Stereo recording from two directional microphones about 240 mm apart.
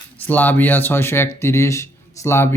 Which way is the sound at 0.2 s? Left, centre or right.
Centre.